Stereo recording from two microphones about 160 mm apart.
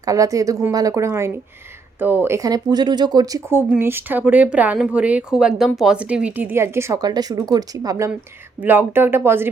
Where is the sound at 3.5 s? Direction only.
15° right (ahead or behind).